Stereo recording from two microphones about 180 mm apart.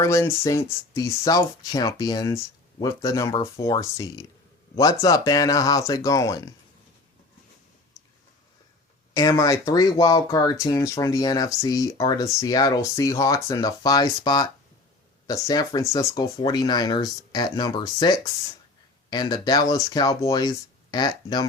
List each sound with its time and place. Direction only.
0.0 s speech: 15° left (ahead or behind)
9.1 s speech: 20° left (ahead or behind)